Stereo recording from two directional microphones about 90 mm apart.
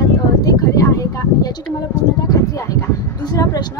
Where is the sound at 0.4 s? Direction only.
40° left (ahead or behind).